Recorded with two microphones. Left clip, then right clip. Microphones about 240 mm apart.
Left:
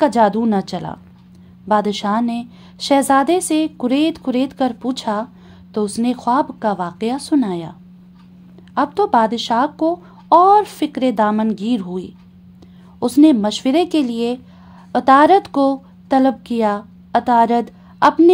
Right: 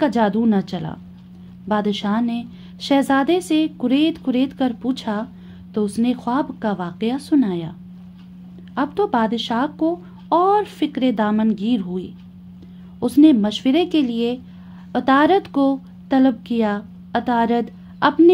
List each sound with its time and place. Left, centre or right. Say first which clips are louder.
0.0 s a woman's voice: left 4 dB; left
8.7 s a woman's voice: left 5 dB; left